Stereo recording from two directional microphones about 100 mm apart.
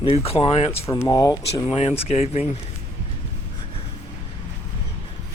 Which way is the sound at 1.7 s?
80° left.